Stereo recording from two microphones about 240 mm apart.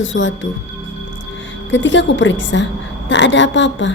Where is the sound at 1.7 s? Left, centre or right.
Left.